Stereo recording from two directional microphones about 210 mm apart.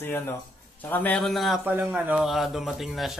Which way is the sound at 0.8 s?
10° left (ahead or behind).